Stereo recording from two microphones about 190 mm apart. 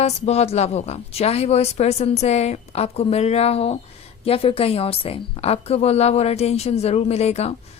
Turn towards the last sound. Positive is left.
turn(degrees=35)  # may be behind; listen again after turning